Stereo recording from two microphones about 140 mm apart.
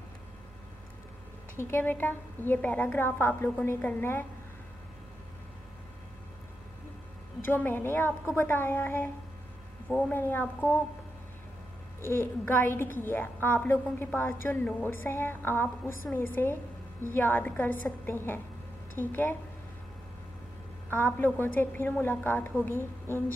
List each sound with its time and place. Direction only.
1.6 s a woman's voice: 15° left (ahead or behind)
7.4 s a woman's voice: 15° left (ahead or behind)
12.0 s a woman's voice: 15° left (ahead or behind)
20.9 s a woman's voice: 15° left (ahead or behind)